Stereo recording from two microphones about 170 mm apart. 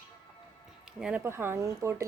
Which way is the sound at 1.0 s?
10° right (ahead or behind).